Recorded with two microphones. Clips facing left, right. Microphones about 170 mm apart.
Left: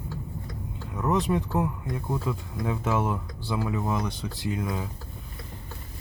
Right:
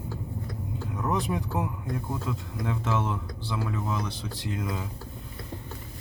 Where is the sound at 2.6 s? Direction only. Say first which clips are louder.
Left 2 dB; 10° left (ahead or behind).